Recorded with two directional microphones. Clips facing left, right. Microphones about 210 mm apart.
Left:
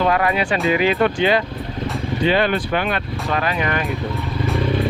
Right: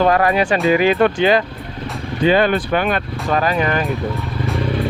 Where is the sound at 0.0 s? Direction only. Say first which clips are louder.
Right 4 dB; 45° right (ahead or behind).